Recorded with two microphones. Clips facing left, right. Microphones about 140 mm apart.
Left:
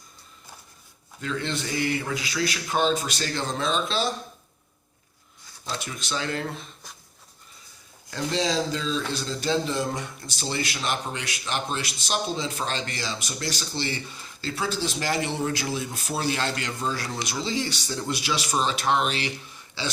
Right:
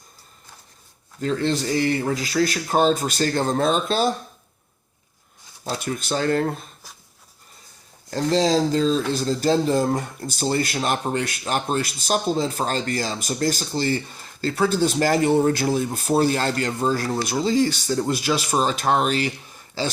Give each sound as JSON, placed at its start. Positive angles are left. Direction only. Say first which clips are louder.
{"t": 1.2, "sound": "speech", "louder": "right 7 dB", "side_deg": -35}
{"t": 5.8, "sound": "speech", "louder": "right 9 dB", "side_deg": -45}
{"t": 8.1, "sound": "speech", "louder": "right 7 dB", "side_deg": -40}